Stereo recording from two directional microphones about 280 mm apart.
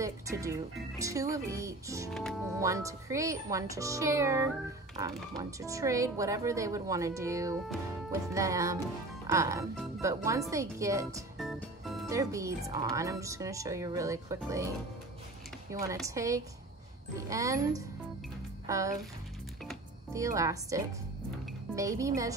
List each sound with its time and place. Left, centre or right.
0.0 s speech: centre
2.0 s speech: centre
2.6 s speech: centre
11.3 s organ: centre
12.1 s speech: centre
15.7 s speech: centre
20.1 s speech: centre